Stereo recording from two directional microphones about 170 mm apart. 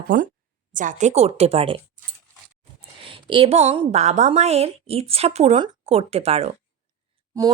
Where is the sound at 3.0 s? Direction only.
30° right (ahead or behind).